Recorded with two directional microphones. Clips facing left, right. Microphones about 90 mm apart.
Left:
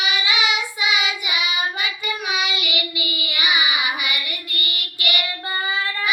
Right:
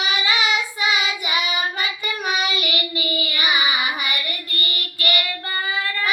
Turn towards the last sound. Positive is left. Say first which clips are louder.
# right 2 dB
turn(degrees=-40)  # may be behind; listen again after turning